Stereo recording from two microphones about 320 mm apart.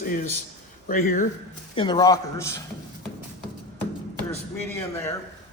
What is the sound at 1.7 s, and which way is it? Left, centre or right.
Speech, centre.